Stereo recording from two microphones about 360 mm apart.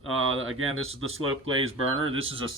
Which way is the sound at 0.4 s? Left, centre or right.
Right.